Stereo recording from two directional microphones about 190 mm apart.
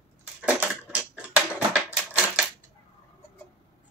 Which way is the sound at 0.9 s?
5° right (ahead or behind).